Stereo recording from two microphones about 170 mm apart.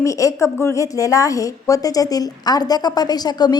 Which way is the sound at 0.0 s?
20° left (ahead or behind).